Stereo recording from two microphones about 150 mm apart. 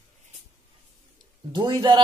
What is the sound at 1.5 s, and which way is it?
Speech, 30° right (ahead or behind).